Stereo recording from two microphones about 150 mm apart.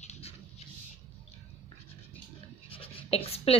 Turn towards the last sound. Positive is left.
turn(degrees=40)  # may be behind; listen again after turning